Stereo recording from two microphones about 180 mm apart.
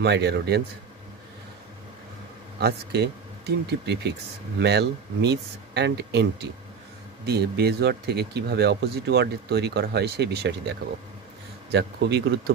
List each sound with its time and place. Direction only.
0.0 s speech: 65° right (ahead or behind)
2.6 s speech: 65° right (ahead or behind)